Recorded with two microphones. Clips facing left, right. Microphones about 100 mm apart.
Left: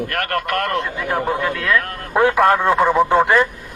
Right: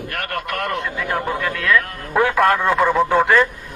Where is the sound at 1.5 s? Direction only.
30° left (ahead or behind).